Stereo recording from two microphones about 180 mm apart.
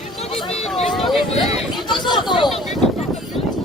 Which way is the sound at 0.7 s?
Centre (ahead or behind).